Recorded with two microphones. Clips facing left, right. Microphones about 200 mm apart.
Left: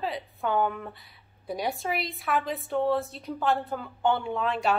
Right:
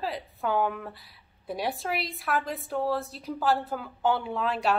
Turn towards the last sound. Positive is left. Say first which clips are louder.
# left 1 dB
turn(degrees=0)  # may be behind; listen again after turning